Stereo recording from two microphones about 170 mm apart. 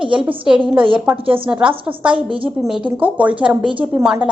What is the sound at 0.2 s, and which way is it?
A woman's voice, 5° right (ahead or behind).